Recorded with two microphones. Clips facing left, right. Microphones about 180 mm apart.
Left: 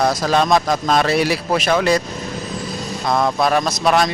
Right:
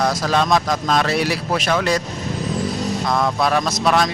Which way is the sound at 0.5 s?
25° left (ahead or behind).